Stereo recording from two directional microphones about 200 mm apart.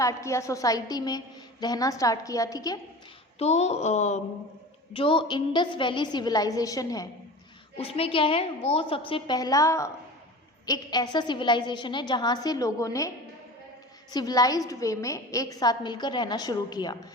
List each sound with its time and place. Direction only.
0.0 s a woman's voice: 15° left (ahead or behind)
3.3 s a woman's voice: 35° left (ahead or behind); by 7.1 s 15° left (ahead or behind)
7.8 s a woman's voice: 30° left (ahead or behind)
14.1 s a woman's voice: 20° left (ahead or behind)